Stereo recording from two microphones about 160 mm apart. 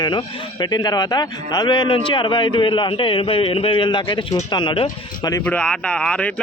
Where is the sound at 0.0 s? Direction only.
30° left (ahead or behind).